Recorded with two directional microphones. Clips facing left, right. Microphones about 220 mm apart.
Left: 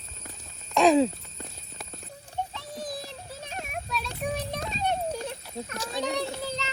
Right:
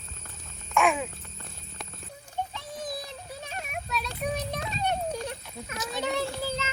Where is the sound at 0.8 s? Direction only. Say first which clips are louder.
Left 6 dB; 35° left (ahead or behind).